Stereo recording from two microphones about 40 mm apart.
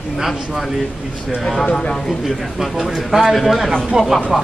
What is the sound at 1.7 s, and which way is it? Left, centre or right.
Speech, centre.